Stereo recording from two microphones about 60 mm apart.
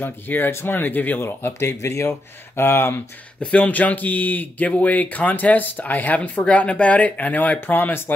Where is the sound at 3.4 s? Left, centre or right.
Left.